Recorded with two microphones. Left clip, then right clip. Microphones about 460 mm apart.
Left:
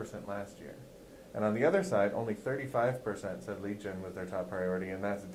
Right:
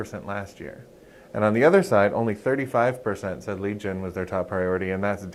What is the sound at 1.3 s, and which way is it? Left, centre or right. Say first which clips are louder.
Speech: right 11 dB; right.